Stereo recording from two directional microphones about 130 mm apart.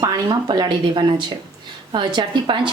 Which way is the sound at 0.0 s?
35° right (ahead or behind).